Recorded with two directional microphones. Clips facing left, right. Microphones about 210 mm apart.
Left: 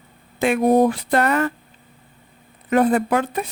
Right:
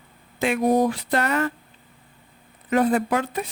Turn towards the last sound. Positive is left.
turn(degrees=55)  # may be behind; listen again after turning